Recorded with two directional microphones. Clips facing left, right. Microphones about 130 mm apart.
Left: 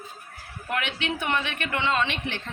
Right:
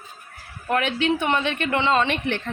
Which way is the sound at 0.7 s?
40° right (ahead or behind).